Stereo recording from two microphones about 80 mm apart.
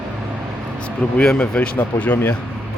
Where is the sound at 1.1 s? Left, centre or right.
Centre.